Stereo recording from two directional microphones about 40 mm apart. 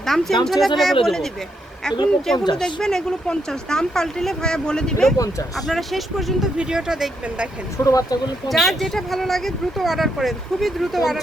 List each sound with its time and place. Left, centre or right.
0.0 s speech: centre
2.6 s speech: left
5.5 s speech: centre
6.6 s speech: centre
8.4 s speech: centre